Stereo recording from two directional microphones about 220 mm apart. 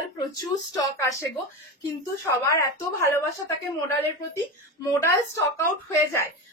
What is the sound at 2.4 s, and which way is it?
Speech, 15° left (ahead or behind).